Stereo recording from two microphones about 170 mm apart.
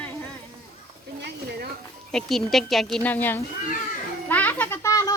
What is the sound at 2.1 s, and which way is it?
Speech, centre (ahead or behind).